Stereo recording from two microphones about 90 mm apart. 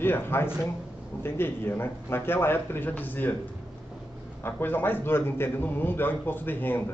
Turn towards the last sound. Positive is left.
turn(degrees=20)  # may be behind; listen again after turning